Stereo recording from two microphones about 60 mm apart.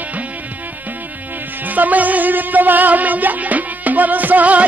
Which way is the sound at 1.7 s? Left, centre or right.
Right.